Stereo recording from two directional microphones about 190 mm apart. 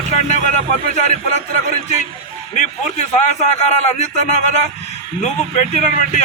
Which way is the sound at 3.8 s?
40° left (ahead or behind).